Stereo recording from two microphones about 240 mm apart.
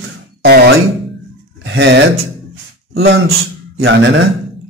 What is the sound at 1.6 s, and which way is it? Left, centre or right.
Speech, right.